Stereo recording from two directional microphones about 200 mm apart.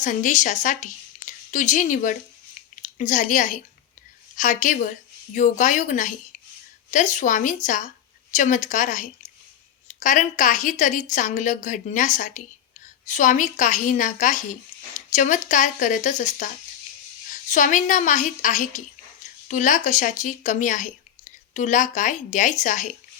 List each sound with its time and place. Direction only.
0.0 s speech: 40° left (ahead or behind)
17.5 s speech: 40° left (ahead or behind)